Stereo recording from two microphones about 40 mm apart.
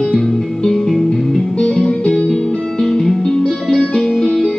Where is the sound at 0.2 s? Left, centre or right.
Centre.